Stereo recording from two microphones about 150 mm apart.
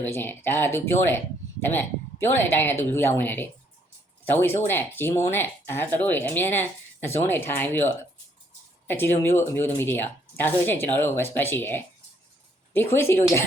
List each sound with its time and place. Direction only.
0.0 s speech: 15° left (ahead or behind)